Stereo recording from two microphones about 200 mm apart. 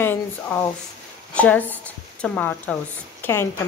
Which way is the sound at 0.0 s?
10° left (ahead or behind).